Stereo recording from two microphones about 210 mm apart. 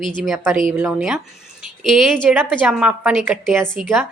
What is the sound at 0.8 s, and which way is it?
A woman's voice, 5° right (ahead or behind).